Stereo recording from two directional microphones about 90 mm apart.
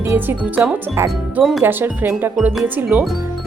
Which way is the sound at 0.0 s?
20° right (ahead or behind).